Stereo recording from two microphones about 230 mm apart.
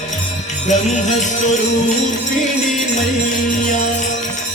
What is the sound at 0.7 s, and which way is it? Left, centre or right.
Music, left.